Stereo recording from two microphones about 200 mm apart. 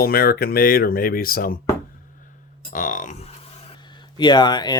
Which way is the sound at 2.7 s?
40° left (ahead or behind).